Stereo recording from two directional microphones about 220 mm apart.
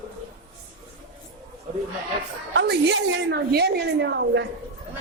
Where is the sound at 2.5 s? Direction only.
55° right (ahead or behind).